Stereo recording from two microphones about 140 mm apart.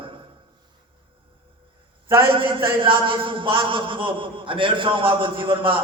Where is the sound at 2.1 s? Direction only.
35° right (ahead or behind).